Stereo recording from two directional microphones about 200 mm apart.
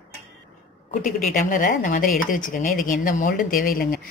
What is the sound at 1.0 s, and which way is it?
A woman's voice, 40° left (ahead or behind).